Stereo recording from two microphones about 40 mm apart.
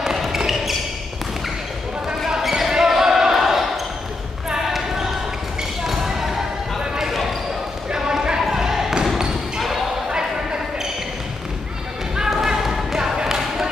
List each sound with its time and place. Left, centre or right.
2.0 s basketball bounce: centre
10.0 s basketball bounce: right
12.3 s basketball bounce: centre